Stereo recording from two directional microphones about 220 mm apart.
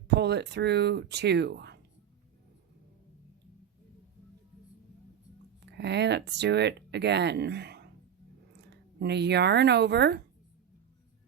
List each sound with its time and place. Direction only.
0.1 s speech: 50° right (ahead or behind)
5.6 s speech: 50° right (ahead or behind)